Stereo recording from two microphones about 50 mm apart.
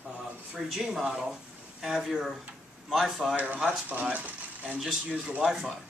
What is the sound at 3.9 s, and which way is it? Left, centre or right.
Speech, right.